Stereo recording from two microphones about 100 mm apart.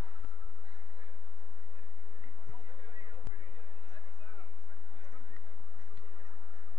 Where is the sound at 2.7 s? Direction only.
50° right (ahead or behind).